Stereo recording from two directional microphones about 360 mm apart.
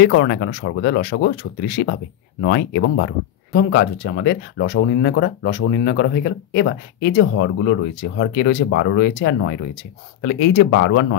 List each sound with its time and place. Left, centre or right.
0.0 s speech: left